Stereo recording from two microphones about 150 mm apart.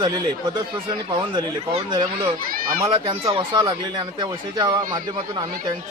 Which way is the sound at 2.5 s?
75° right (ahead or behind).